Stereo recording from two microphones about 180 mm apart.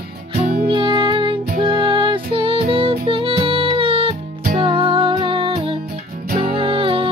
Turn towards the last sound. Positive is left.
turn(degrees=-30)  # may be behind; listen again after turning